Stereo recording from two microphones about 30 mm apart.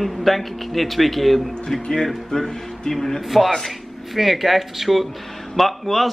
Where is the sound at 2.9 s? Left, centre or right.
Centre.